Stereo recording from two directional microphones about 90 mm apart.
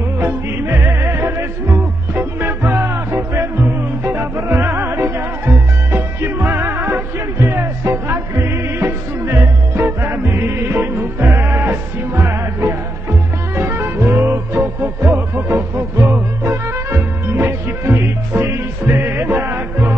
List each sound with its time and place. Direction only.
0.2 s music: 25° right (ahead or behind)
13.6 s music: 25° right (ahead or behind)